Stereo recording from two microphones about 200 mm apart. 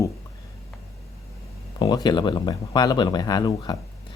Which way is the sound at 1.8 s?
20° left (ahead or behind).